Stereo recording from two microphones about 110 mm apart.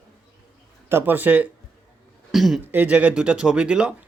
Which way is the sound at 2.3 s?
Centre (ahead or behind).